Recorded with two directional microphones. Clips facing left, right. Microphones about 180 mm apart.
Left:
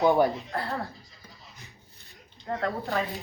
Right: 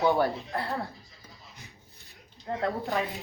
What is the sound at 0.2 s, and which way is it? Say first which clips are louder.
Speech: left 3 dB; 15° left (ahead or behind).